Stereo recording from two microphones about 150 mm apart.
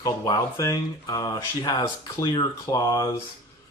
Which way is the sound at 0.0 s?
25° left (ahead or behind).